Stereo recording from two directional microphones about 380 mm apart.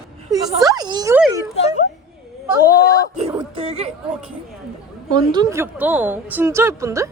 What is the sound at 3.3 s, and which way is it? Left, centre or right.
Speech, centre.